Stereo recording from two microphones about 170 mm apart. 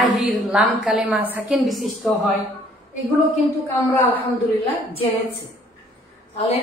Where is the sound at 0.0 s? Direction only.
Centre (ahead or behind).